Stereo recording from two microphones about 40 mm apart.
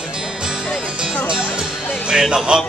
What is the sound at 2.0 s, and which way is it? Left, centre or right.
Speech, centre.